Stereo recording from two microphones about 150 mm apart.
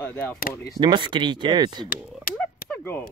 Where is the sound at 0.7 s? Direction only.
30° right (ahead or behind).